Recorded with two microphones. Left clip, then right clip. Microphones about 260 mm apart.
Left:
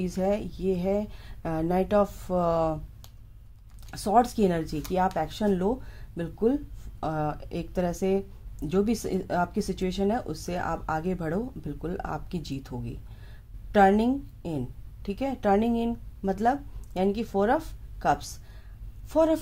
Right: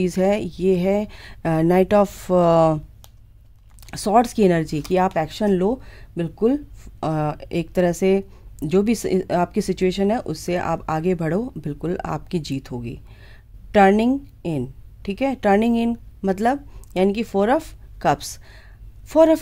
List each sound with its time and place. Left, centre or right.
0.0 s speech: right
3.8 s speech: right